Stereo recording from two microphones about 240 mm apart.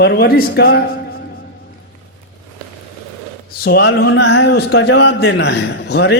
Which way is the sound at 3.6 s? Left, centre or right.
Left.